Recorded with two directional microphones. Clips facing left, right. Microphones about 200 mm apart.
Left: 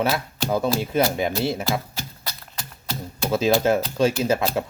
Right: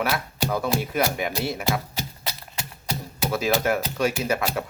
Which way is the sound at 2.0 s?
15° right (ahead or behind).